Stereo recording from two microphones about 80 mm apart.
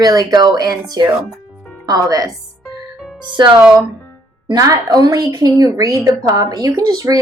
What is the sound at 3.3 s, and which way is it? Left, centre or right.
Speech, right.